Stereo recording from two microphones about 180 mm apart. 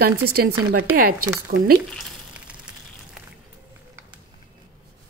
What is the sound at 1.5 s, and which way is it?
Speech, 60° right (ahead or behind).